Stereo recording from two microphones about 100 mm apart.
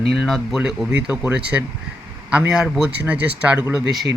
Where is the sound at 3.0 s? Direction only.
15° right (ahead or behind).